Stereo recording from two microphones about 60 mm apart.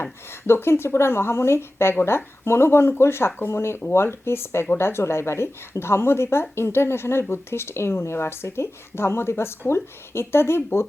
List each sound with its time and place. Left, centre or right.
0.0 s speech: left